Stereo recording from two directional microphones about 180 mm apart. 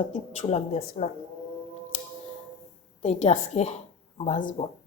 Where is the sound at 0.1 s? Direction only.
40° left (ahead or behind).